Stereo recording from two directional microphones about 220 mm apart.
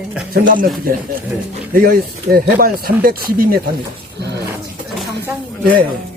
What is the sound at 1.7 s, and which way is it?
Speech, 40° right (ahead or behind).